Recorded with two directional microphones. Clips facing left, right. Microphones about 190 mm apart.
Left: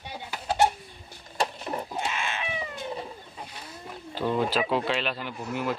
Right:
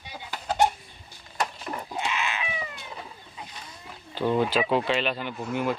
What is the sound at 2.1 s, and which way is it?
Goat, 45° left (ahead or behind).